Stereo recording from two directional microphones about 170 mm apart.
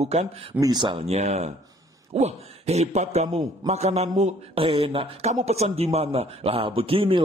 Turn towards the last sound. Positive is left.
turn(degrees=-35)  # may be behind; listen again after turning